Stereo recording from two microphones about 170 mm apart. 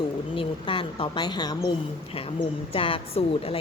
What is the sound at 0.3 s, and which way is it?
Speech, 30° left (ahead or behind).